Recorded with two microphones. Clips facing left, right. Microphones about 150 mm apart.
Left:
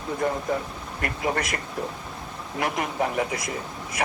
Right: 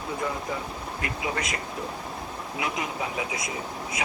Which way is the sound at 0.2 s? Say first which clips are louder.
Left 7 dB; 55° left (ahead or behind).